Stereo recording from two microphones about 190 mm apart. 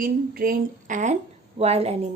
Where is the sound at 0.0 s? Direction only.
50° right (ahead or behind).